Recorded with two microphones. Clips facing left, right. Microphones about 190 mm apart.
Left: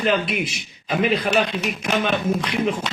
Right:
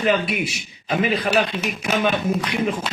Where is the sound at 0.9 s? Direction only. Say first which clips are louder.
Even; centre (ahead or behind).